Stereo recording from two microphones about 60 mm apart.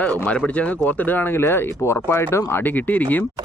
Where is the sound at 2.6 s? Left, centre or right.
Left.